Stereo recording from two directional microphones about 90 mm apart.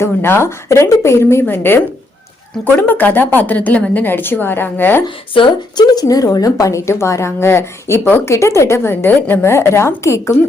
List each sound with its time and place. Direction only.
0.0 s a woman's voice: 25° left (ahead or behind)
5.0 s speech: 65° left (ahead or behind)
5.8 s a woman's voice: 45° left (ahead or behind)